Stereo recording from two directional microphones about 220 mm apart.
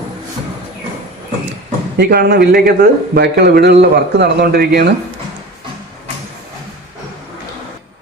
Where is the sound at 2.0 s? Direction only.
45° right (ahead or behind).